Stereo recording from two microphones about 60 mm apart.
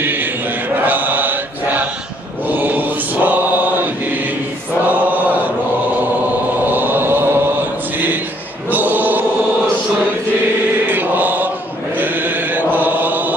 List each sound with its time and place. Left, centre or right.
0.0 s chant: right
2.4 s mantra: right
6.6 s a sound: right
8.6 s chant: right
10.9 s mantra: right
12.0 s chant: right
12.7 s mantra: right